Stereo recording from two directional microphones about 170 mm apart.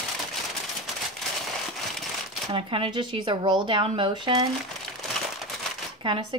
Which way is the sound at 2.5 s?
30° right (ahead or behind).